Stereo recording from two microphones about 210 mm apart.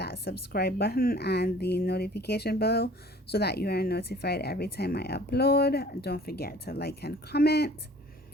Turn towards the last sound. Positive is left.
turn(degrees=50)  # may be behind; listen again after turning